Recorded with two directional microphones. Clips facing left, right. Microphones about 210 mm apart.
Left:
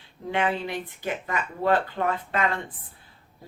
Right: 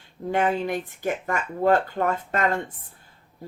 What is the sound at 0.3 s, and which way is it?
Speech, 45° right (ahead or behind).